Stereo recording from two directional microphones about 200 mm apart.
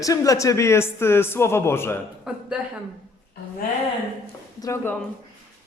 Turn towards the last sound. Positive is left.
turn(degrees=15)  # may be behind; listen again after turning